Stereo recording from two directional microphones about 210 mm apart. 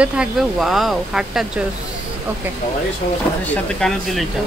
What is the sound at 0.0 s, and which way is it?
Speech, 5° right (ahead or behind).